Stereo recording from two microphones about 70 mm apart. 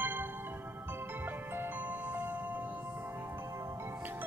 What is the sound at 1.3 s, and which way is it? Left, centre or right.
Music, right.